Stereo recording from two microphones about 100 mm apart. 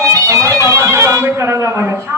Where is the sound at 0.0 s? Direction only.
30° right (ahead or behind).